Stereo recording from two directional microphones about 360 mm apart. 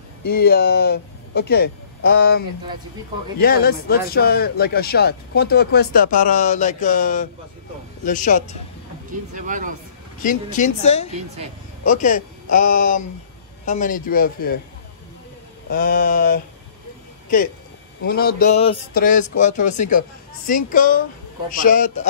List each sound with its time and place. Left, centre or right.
0.2 s speech: left
9.3 s speech: right
10.2 s speech: left
15.7 s speech: left
18.0 s speech: left